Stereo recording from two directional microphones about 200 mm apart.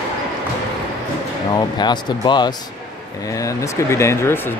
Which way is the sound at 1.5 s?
20° left (ahead or behind).